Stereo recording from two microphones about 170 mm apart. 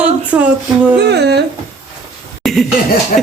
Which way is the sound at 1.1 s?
75° right (ahead or behind).